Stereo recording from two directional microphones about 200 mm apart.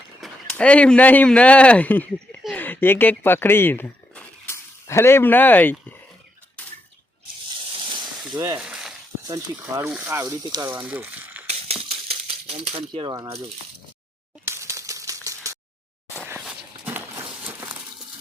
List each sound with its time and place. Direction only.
0.2 s speech: 5° left (ahead or behind)
8.3 s speech: 15° right (ahead or behind)
8.5 s frying: 5° right (ahead or behind)
9.2 s speech: 15° right (ahead or behind)
11.4 s coin: 30° right (ahead or behind)
14.4 s typewriter: 15° right (ahead or behind)
16.2 s walk: 5° right (ahead or behind)
17.4 s horse: 10° right (ahead or behind)